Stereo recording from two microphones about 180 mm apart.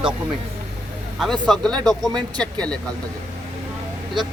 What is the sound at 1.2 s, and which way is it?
Speech, centre (ahead or behind).